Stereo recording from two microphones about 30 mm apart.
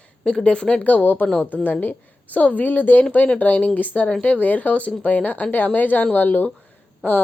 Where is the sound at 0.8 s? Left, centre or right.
Left.